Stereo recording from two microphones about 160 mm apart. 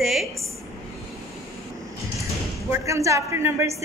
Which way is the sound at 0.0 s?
Centre (ahead or behind).